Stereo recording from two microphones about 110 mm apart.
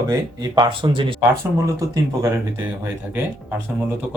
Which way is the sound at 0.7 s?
50° right (ahead or behind).